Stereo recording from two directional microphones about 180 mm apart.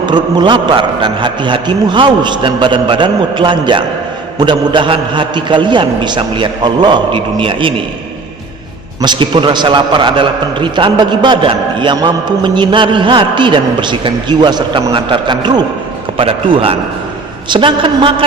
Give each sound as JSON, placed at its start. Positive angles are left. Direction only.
{"t": 0.0, "sound": "a man's voice", "side_deg": -25}
{"t": 9.0, "sound": "a man's voice", "side_deg": -25}